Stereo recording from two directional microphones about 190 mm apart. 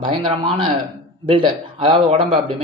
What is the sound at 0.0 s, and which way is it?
Speech, 25° right (ahead or behind).